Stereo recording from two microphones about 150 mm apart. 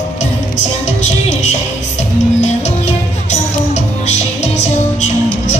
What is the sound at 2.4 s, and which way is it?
Music, 50° left (ahead or behind).